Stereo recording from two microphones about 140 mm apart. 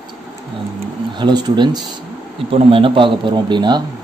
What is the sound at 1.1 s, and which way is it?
A man's voice, 30° right (ahead or behind).